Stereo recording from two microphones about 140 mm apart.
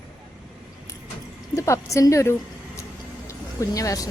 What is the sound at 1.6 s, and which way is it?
A woman's voice, 20° left (ahead or behind).